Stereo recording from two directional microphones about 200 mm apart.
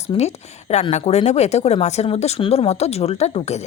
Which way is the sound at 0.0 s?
35° left (ahead or behind).